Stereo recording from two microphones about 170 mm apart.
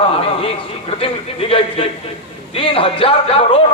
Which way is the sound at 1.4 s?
30° left (ahead or behind).